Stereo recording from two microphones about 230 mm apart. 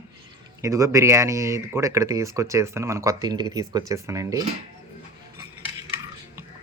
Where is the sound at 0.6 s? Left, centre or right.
Centre.